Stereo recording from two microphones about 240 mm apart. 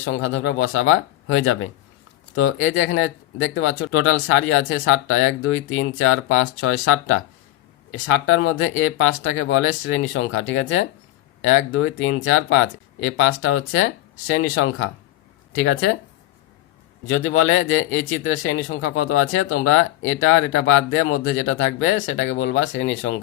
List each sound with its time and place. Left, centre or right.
0.0 s speech: left
17.1 s speech: left